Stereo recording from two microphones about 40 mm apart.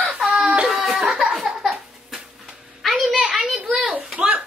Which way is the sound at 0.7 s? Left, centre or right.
Centre.